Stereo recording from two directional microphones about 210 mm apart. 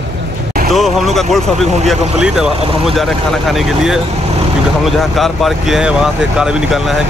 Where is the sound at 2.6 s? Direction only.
25° right (ahead or behind).